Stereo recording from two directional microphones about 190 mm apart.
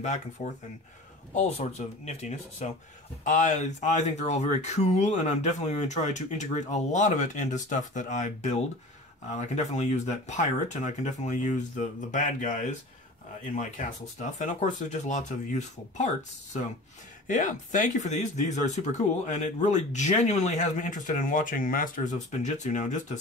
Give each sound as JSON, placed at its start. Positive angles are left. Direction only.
{"t": 0.0, "sound": "speech", "side_deg": 40}
{"t": 17.3, "sound": "speech", "side_deg": 40}